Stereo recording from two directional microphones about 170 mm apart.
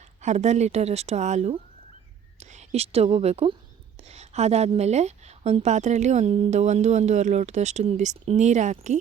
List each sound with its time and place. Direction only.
0.2 s a woman's voice: 45° right (ahead or behind)